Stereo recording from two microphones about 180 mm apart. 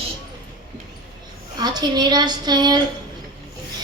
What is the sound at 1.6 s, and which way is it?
A woman's voice, 25° right (ahead or behind).